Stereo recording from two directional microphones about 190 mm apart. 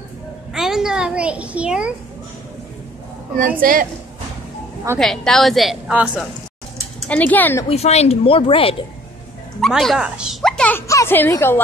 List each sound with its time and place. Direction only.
0.5 s a woman's voice: centre (ahead or behind)
3.3 s a woman's voice: 45° right (ahead or behind)
4.9 s a woman's voice: 5° left (ahead or behind)
7.1 s speech: 10° left (ahead or behind)
7.6 s speech: 35° left (ahead or behind)
9.6 s a woman's voice: centre (ahead or behind)